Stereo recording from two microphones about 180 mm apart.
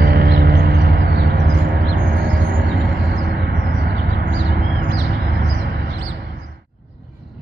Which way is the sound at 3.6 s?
90° right.